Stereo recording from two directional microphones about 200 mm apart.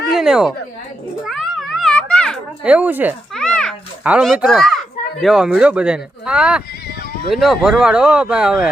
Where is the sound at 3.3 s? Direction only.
5° left (ahead or behind).